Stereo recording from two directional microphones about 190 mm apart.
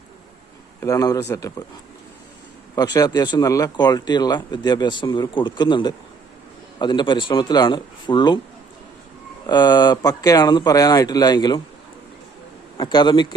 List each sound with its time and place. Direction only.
0.8 s speech: 15° left (ahead or behind)
2.7 s speech: 20° left (ahead or behind)
9.5 s speech: 20° left (ahead or behind)
12.7 s speech: 25° left (ahead or behind)